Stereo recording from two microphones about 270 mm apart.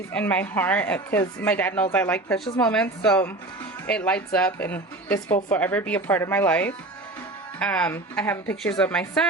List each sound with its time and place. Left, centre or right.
0.1 s speech: centre